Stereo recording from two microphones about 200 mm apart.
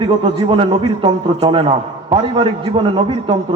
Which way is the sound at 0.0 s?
25° right (ahead or behind).